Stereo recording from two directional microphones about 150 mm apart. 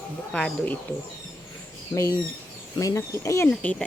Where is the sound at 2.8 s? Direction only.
20° left (ahead or behind).